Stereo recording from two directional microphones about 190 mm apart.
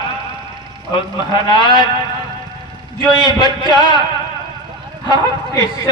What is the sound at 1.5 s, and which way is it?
Speech, 25° left (ahead or behind).